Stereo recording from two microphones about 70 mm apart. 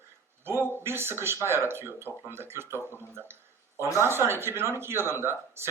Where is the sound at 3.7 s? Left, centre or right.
Left.